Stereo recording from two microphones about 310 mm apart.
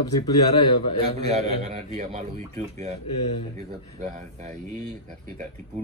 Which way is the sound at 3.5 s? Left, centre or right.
Right.